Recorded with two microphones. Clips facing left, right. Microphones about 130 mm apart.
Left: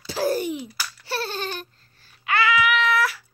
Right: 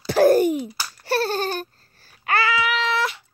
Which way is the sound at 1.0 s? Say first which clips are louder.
Right 7 dB; 45° right (ahead or behind).